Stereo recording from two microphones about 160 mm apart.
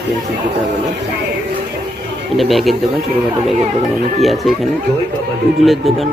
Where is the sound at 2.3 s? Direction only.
Centre (ahead or behind).